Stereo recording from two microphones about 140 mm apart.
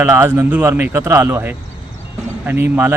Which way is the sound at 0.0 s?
15° right (ahead or behind).